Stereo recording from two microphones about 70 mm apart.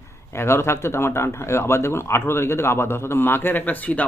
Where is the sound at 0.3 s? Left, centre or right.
Left.